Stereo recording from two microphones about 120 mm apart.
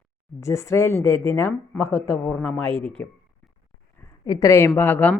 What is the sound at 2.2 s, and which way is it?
Speech, 5° left (ahead or behind).